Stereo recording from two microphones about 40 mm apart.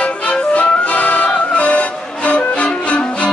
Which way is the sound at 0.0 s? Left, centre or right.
Left.